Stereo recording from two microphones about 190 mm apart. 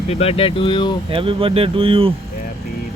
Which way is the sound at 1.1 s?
30° right (ahead or behind).